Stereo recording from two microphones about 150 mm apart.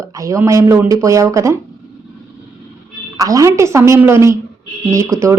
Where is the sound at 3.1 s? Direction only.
25° right (ahead or behind).